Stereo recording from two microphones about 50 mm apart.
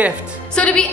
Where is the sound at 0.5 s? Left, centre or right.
Left.